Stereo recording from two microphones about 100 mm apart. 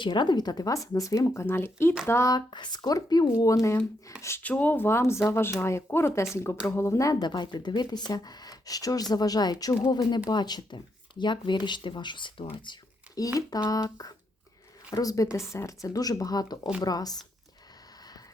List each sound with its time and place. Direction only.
0.0 s speech: 50° left (ahead or behind); by 2.3 s 25° left (ahead or behind)
2.3 s speech: 45° left (ahead or behind)
4.4 s speech: 15° left (ahead or behind); by 7.2 s 30° left (ahead or behind)
7.2 s speech: 50° left (ahead or behind)
13.1 s speech: 35° left (ahead or behind)